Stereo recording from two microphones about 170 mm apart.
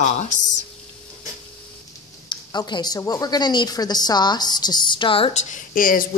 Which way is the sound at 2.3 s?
25° left (ahead or behind).